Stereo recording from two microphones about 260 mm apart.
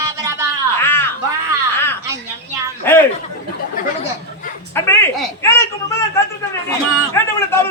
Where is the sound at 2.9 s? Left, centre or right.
Centre.